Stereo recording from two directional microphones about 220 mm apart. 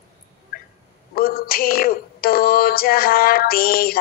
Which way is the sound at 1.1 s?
40° left (ahead or behind).